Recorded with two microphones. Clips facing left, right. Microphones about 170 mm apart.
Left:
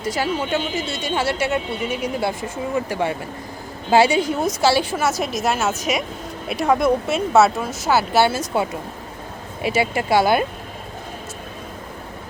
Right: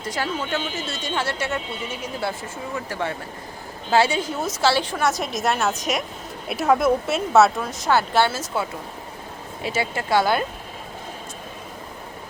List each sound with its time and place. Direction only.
0.0 s a woman's voice: 10° left (ahead or behind)
9.6 s speech: 15° left (ahead or behind)